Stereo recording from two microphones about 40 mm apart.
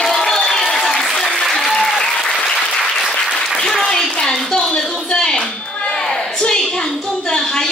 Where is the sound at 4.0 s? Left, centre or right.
Centre.